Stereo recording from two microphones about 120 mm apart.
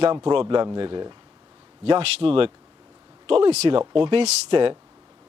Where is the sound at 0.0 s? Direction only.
40° right (ahead or behind).